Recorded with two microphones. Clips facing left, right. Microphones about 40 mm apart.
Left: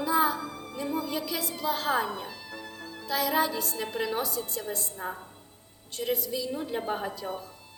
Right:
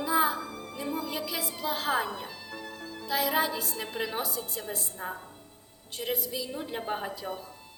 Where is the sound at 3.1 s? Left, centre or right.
Centre.